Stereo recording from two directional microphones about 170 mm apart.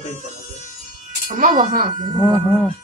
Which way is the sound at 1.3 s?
50° right (ahead or behind).